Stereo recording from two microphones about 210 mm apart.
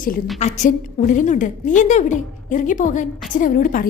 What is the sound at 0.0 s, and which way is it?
A woman's voice, 35° left (ahead or behind).